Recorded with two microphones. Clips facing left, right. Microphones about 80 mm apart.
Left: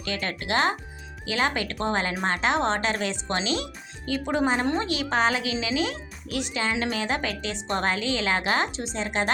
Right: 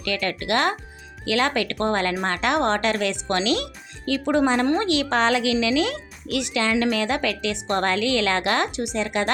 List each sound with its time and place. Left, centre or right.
0.0 s a woman's voice: right
4.8 s a woman's voice: right
8.8 s speech: left